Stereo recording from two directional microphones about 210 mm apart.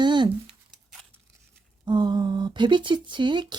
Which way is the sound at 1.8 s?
20° right (ahead or behind).